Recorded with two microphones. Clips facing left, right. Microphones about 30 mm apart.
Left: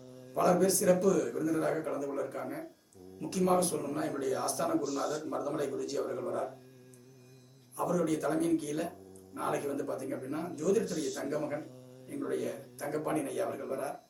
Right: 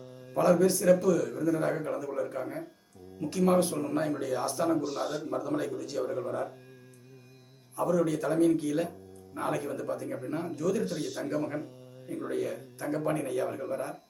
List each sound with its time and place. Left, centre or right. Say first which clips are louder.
0.0 s mantra: right 3 dB; right
0.3 s a man's voice: right 3 dB; centre
4.8 s a man's voice: right 1 dB; right
5.2 s a man's voice: right 2 dB; centre
7.8 s a man's voice: right 3 dB; centre